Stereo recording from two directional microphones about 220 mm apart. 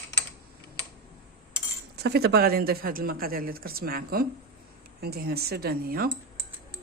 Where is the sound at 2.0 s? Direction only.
45° right (ahead or behind).